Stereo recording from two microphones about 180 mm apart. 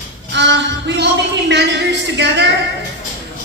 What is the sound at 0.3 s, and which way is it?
Speech, 75° right (ahead or behind).